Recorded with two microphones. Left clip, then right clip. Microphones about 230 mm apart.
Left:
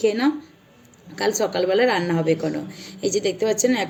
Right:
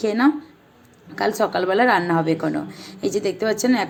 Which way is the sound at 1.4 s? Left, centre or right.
Centre.